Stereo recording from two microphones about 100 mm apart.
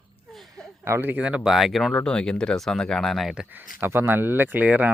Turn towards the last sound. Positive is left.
turn(degrees=-15)  # may be behind; listen again after turning